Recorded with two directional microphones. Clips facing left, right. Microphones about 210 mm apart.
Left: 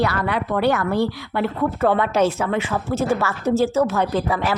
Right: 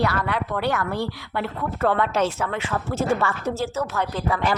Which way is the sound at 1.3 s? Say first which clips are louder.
Left 6 dB; 10° left (ahead or behind).